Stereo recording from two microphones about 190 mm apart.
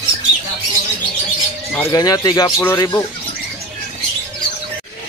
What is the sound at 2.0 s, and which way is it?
Speech, 20° left (ahead or behind).